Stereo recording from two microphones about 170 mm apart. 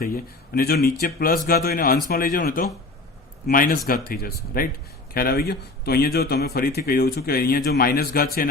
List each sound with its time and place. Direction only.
0.0 s speech: 60° left (ahead or behind)